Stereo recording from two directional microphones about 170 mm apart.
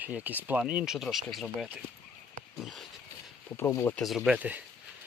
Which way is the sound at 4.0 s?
Centre (ahead or behind).